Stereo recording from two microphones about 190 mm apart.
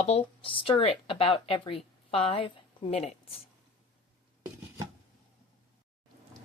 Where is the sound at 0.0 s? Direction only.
35° left (ahead or behind).